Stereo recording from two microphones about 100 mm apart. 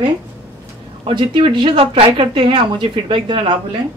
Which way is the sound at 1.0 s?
55° right (ahead or behind).